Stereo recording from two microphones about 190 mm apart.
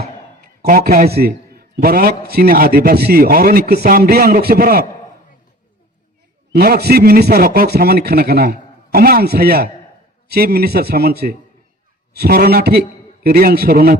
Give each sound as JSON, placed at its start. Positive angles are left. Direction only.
{"t": 0.6, "sound": "a man's voice", "side_deg": -50}
{"t": 6.5, "sound": "a man's voice", "side_deg": -55}